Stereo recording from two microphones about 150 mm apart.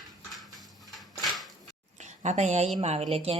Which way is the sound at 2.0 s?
50° right (ahead or behind).